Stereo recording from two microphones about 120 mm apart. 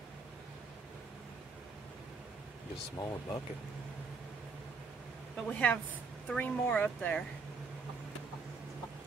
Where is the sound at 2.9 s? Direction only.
30° left (ahead or behind).